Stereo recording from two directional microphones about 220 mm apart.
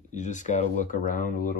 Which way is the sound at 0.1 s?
35° left (ahead or behind).